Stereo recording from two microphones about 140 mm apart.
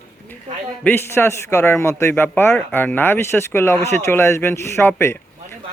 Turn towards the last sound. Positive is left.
turn(degrees=20)  # may be behind; listen again after turning